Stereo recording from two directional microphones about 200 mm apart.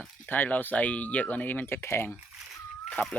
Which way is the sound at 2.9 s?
5° left (ahead or behind).